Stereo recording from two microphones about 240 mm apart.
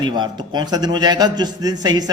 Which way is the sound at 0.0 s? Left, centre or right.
Centre.